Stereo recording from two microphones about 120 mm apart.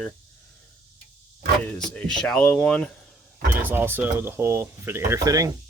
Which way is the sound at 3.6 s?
15° right (ahead or behind).